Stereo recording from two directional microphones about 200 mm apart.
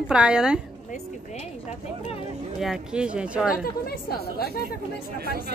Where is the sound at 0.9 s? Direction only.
35° left (ahead or behind).